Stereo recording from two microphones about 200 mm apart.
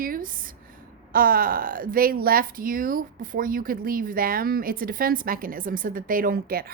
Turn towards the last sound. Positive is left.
turn(degrees=-50)  # may be behind; listen again after turning